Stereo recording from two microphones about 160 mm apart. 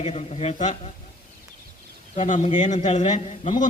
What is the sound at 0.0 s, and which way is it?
Speech, 45° left (ahead or behind).